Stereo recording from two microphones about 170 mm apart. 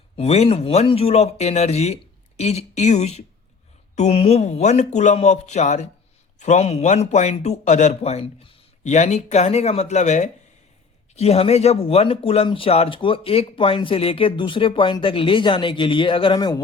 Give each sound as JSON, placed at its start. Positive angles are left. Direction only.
{"t": 0.2, "sound": "speech", "side_deg": 40}
{"t": 8.8, "sound": "speech", "side_deg": 45}